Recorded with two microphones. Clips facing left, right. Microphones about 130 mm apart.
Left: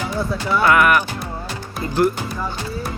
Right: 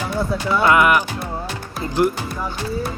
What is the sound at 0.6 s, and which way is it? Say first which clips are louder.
Speech: even; 20° right (ahead or behind).